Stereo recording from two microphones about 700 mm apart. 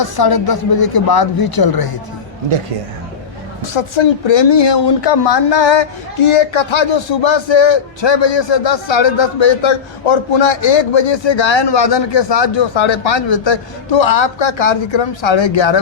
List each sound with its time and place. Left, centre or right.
0.0 s speech: left
3.6 s speech: left